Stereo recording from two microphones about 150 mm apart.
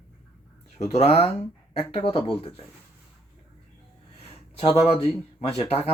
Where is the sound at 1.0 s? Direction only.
40° left (ahead or behind).